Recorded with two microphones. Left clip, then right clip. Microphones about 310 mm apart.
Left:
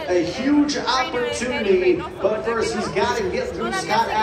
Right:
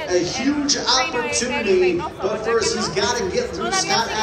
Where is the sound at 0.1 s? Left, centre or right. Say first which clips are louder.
Left 2 dB; left.